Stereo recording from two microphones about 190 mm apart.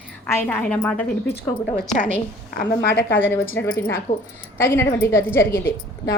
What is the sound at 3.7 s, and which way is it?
A woman's voice, 10° left (ahead or behind).